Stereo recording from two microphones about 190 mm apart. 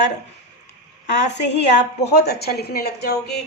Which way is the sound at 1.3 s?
65° left (ahead or behind).